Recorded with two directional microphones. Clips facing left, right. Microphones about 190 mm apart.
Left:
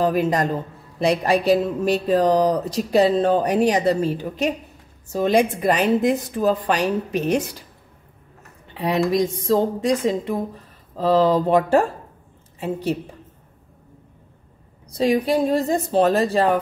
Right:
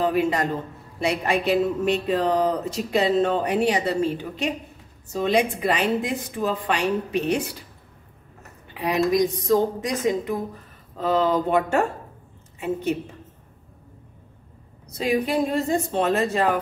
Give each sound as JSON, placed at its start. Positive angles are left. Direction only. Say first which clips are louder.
{"t": 0.0, "sound": "a man's voice", "louder": "left 2 dB", "side_deg": 40}
{"t": 8.8, "sound": "a woman's voice", "louder": "left 1 dB", "side_deg": 30}
{"t": 15.0, "sound": "speech", "louder": "left 4 dB", "side_deg": 35}